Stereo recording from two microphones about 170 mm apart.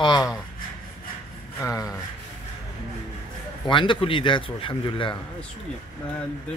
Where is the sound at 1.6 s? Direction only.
20° left (ahead or behind).